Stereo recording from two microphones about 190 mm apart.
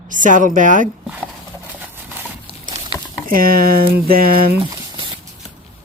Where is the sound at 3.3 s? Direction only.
50° right (ahead or behind).